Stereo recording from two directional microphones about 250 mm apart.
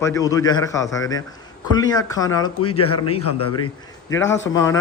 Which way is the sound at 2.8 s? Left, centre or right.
Left.